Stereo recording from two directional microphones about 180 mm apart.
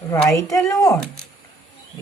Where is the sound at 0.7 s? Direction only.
20° left (ahead or behind).